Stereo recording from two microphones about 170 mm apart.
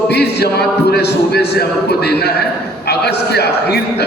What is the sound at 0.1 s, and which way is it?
A man's voice, 75° left (ahead or behind).